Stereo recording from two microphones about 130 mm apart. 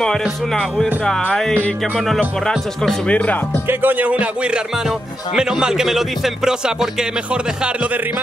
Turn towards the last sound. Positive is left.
turn(degrees=-10)  # may be behind; listen again after turning